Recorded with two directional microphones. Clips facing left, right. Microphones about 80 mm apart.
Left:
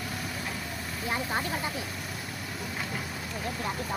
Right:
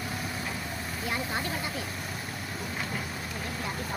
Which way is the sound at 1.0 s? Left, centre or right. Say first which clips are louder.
Left 2 dB; left.